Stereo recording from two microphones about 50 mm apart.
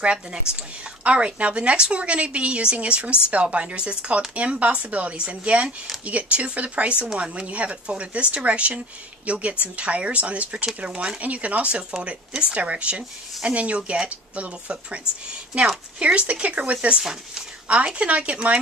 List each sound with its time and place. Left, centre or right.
0.0 s speech: centre
16.0 s speech: right
17.0 s speech: centre
17.6 s speech: right